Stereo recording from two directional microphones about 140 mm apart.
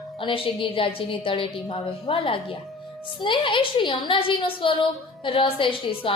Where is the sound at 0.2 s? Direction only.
40° left (ahead or behind).